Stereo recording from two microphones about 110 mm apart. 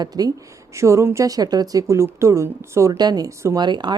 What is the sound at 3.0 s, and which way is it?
Speech, 35° right (ahead or behind).